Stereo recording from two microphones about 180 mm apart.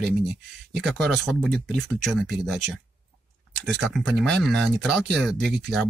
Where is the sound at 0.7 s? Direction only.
5° left (ahead or behind).